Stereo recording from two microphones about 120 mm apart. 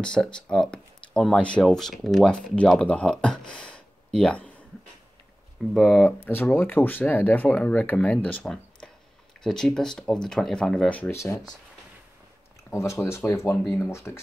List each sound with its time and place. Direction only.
0.0 s speech: 5° left (ahead or behind)
5.7 s speech: centre (ahead or behind)
6.2 s speech: 15° left (ahead or behind)
11.1 s speech: 20° left (ahead or behind)
12.7 s speech: 25° left (ahead or behind)